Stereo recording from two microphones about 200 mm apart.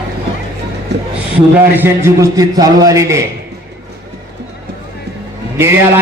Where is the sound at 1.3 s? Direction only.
10° right (ahead or behind).